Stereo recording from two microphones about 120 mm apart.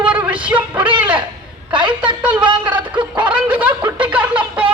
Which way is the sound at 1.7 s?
40° right (ahead or behind).